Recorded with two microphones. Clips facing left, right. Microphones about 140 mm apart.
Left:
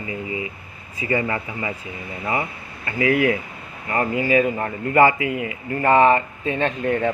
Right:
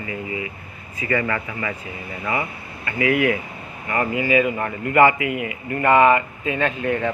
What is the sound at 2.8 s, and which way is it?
Speech, 35° left (ahead or behind).